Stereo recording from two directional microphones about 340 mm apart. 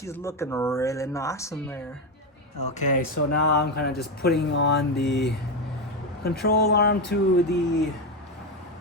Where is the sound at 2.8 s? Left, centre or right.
Left.